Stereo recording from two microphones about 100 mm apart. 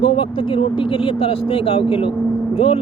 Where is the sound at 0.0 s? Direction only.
65° left (ahead or behind).